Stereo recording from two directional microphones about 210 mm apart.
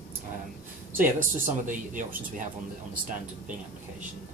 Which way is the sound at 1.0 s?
40° right (ahead or behind).